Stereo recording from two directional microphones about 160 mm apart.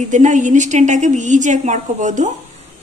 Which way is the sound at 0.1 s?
50° right (ahead or behind).